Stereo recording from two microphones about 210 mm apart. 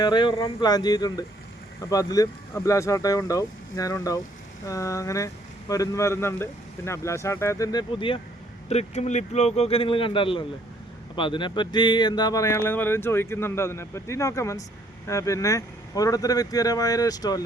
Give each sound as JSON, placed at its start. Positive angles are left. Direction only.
{"t": 0.0, "sound": "speech", "side_deg": 20}